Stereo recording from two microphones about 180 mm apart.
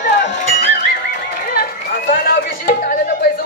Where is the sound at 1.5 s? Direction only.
55° left (ahead or behind).